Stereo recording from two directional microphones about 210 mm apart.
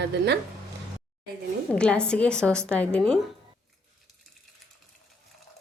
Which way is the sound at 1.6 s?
5° left (ahead or behind).